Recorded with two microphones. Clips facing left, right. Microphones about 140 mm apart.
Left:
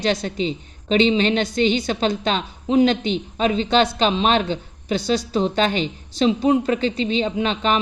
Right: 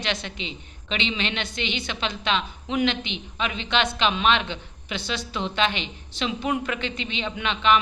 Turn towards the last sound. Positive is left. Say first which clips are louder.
# left 2 dB
turn(degrees=40)  # may be behind; listen again after turning